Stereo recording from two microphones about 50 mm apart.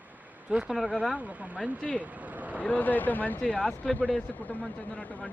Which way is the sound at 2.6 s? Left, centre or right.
Left.